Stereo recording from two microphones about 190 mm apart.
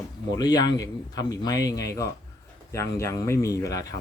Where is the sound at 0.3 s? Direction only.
20° left (ahead or behind).